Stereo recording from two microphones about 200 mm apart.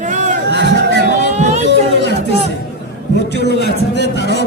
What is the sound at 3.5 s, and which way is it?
Speech, 55° left (ahead or behind).